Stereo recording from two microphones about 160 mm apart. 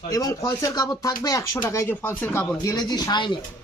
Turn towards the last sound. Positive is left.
turn(degrees=25)  # may be behind; listen again after turning